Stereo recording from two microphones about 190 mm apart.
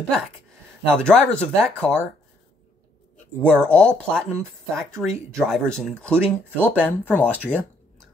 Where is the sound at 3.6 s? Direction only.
5° left (ahead or behind).